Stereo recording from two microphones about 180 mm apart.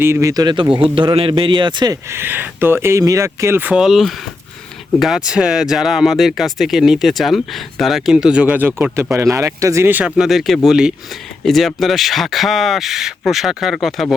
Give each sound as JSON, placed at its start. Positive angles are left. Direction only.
{"t": 0.0, "sound": "a man's voice", "side_deg": -15}